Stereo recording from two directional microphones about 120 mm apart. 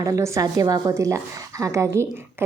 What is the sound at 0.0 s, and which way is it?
A woman's voice, 25° right (ahead or behind).